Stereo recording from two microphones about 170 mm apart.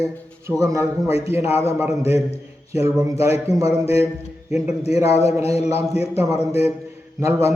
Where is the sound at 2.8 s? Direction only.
20° right (ahead or behind).